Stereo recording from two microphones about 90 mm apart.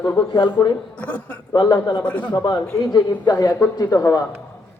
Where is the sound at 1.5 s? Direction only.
50° left (ahead or behind).